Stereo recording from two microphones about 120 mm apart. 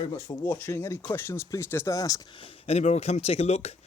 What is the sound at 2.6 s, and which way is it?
Speech, 65° left (ahead or behind).